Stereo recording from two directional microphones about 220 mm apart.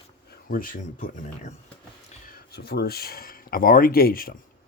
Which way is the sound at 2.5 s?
45° left (ahead or behind).